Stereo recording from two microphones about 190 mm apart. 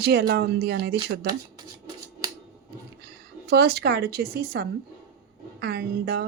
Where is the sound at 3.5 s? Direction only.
60° right (ahead or behind).